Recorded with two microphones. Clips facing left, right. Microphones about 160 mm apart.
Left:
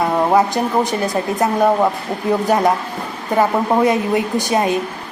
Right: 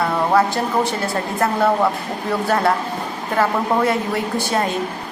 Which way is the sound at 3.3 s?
20° left (ahead or behind).